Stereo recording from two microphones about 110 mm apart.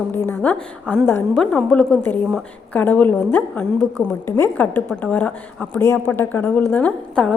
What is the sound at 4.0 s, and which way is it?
Speech, 25° left (ahead or behind).